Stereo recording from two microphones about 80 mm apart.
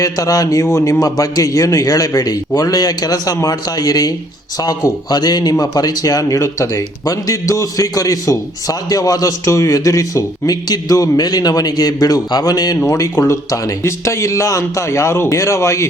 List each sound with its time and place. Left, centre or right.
0.0 s speech: left
12.9 s speech: left